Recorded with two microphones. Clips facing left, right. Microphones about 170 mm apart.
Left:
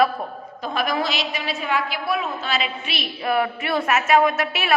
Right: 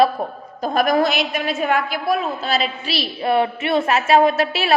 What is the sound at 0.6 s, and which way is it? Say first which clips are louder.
A woman's voice: right 7 dB; 45° right (ahead or behind).